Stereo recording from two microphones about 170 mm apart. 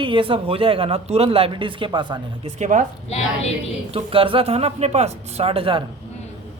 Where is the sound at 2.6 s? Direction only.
45° right (ahead or behind).